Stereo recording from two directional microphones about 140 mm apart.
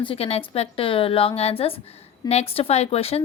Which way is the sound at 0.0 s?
40° left (ahead or behind).